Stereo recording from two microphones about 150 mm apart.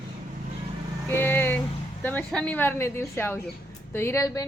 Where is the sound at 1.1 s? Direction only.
15° left (ahead or behind).